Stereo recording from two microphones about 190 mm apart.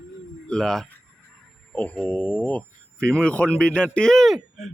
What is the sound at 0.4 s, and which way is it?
Speech, 5° left (ahead or behind).